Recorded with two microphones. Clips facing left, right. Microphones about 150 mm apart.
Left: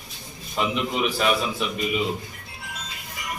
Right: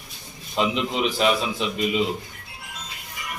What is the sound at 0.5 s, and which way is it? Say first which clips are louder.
A man's voice: right 1 dB; 20° right (ahead or behind).